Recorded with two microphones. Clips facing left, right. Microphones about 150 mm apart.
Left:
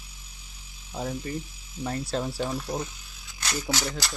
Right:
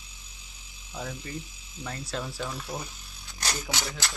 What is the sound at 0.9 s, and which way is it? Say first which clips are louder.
Speech: left 5 dB; 30° left (ahead or behind).